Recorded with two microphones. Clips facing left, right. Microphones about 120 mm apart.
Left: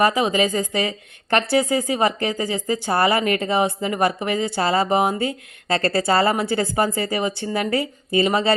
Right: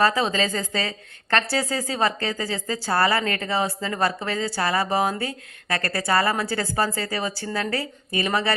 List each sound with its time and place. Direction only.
0.0 s a woman's voice: 15° left (ahead or behind)